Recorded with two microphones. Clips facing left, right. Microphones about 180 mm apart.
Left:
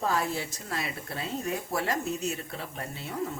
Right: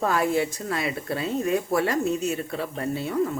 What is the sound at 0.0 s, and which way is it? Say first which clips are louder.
Speech: right 7 dB; 65° right (ahead or behind).